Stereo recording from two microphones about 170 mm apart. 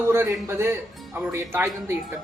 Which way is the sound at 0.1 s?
15° right (ahead or behind).